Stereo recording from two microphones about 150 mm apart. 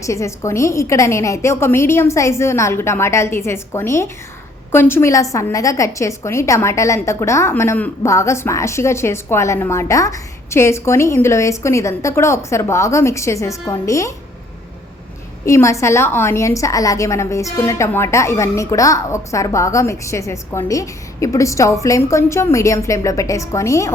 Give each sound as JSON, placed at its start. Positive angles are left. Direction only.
{"t": 0.0, "sound": "a woman's voice", "side_deg": 20}
{"t": 15.4, "sound": "a woman's voice", "side_deg": 20}